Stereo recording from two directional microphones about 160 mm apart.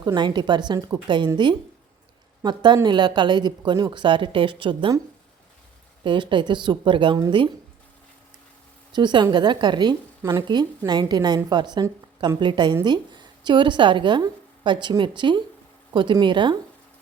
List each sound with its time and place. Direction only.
0.0 s a woman's voice: 25° right (ahead or behind)
2.4 s a woman's voice: 30° right (ahead or behind)
6.1 s a woman's voice: 30° right (ahead or behind)
8.9 s a woman's voice: 30° right (ahead or behind)